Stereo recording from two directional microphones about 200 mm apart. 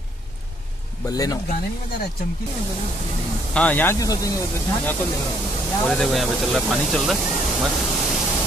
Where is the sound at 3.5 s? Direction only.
5° left (ahead or behind).